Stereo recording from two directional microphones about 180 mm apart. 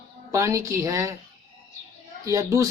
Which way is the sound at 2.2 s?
20° right (ahead or behind).